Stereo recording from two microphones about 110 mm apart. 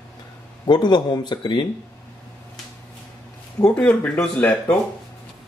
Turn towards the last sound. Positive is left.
turn(degrees=15)  # may be behind; listen again after turning